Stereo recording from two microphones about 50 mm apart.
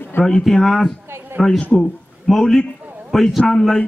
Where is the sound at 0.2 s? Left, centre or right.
Centre.